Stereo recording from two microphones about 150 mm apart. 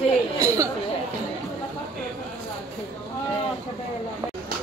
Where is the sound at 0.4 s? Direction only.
20° right (ahead or behind).